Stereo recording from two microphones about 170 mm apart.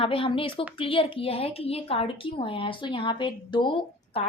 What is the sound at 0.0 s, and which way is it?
A woman's voice, 30° left (ahead or behind).